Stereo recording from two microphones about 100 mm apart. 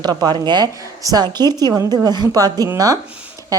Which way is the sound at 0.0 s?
45° right (ahead or behind).